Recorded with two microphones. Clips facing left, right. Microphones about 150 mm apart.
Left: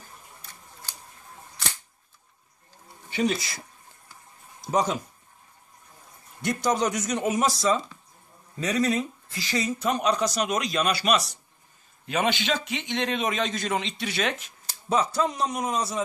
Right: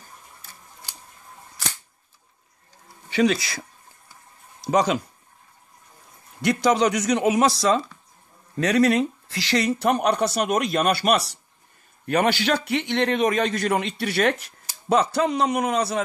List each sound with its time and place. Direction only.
0.4 s scissors: 5° right (ahead or behind)
3.1 s speech: 90° right
4.6 s speech: 80° right
6.4 s a man's voice: 70° right (ahead or behind)